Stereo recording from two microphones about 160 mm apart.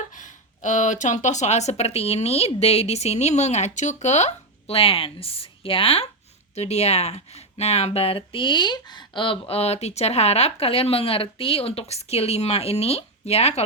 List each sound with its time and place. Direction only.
0.2 s speech: 50° left (ahead or behind)